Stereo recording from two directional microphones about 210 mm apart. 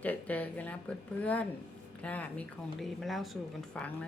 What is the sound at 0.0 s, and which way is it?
A woman's voice, 5° left (ahead or behind).